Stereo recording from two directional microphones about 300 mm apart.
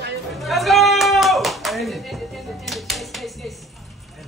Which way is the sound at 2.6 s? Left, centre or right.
Centre.